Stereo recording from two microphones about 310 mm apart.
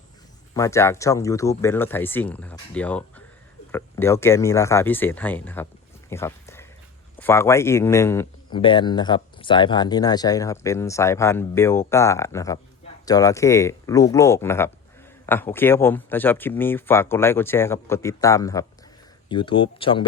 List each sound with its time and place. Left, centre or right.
0.5 s a man's voice: centre
6.1 s a sound: centre
7.2 s a man's voice: centre